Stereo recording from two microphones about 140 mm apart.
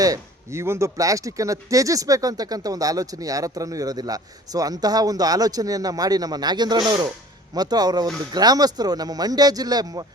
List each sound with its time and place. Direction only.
0.0 s speech: 20° right (ahead or behind)